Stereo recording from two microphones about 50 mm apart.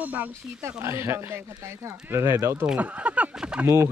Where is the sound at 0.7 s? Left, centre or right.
Right.